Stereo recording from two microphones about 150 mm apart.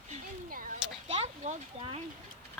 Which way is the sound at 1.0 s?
45° right (ahead or behind).